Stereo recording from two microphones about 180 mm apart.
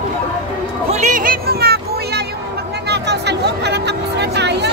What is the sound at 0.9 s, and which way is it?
Music, 45° right (ahead or behind).